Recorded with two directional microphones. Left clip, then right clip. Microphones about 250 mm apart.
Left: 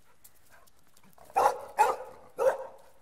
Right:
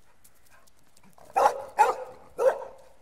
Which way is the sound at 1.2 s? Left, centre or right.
Centre.